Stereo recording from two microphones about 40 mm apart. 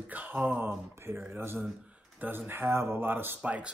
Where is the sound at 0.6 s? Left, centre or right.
Right.